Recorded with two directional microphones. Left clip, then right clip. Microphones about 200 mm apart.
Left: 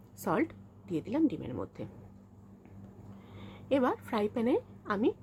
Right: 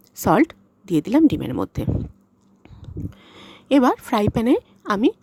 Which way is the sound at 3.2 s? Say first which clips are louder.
Right 8 dB; 55° right (ahead or behind).